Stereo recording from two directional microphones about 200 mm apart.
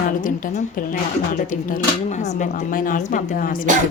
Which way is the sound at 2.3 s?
40° left (ahead or behind).